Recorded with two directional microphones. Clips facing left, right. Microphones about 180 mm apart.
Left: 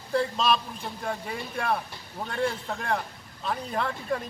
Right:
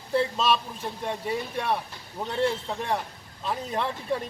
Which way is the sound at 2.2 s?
20° right (ahead or behind).